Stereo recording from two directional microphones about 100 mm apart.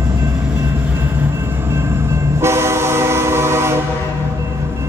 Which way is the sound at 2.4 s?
25° right (ahead or behind).